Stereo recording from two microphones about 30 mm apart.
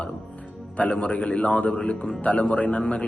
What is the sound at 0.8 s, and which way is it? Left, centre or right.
A man's voice, left.